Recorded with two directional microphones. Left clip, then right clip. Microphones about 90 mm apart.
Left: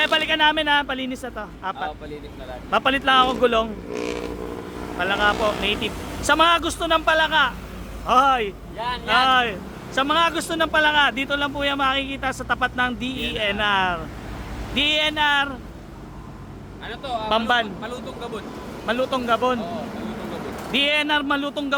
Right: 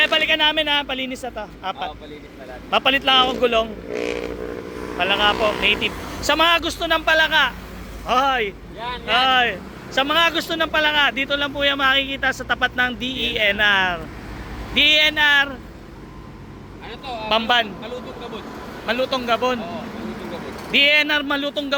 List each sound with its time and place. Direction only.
0.0 s speech: 25° left (ahead or behind)
3.9 s speech: 20° left (ahead or behind)
6.9 s speech: 20° left (ahead or behind)
8.0 s speech: 30° left (ahead or behind)
17.2 s speech: 15° left (ahead or behind)
18.9 s speech: 15° left (ahead or behind)
20.7 s speech: 20° left (ahead or behind)